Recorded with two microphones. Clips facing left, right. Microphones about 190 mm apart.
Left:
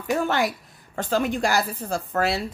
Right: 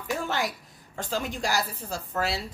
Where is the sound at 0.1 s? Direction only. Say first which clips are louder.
Left 6 dB; 60° left (ahead or behind).